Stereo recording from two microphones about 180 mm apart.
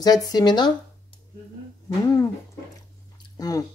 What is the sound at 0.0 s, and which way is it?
Speech, 20° left (ahead or behind).